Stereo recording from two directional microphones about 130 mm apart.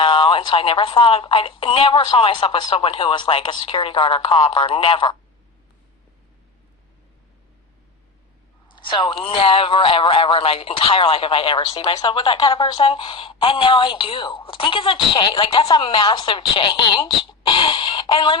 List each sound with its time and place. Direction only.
0.0 s speech: 40° left (ahead or behind)
8.7 s speech: 40° left (ahead or behind)